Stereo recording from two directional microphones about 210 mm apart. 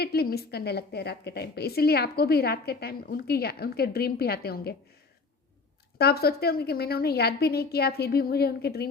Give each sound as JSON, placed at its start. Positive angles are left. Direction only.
{"t": 0.0, "sound": "a woman's voice", "side_deg": 50}
{"t": 6.0, "sound": "a woman's voice", "side_deg": 50}